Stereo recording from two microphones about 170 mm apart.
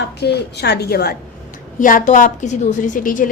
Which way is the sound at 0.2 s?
75° left (ahead or behind).